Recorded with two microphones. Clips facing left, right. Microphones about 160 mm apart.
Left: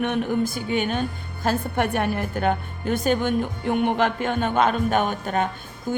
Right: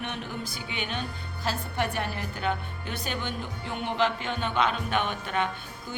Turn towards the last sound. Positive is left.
turn(degrees=50)  # may be behind; listen again after turning